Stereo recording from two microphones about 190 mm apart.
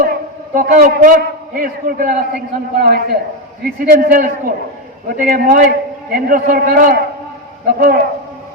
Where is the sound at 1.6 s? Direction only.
50° right (ahead or behind).